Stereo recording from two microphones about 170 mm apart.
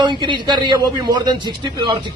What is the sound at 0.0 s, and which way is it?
A man's voice, 30° right (ahead or behind).